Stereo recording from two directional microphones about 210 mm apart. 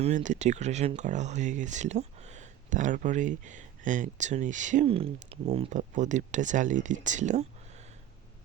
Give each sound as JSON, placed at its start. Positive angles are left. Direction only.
{"t": 0.0, "sound": "speech", "side_deg": -35}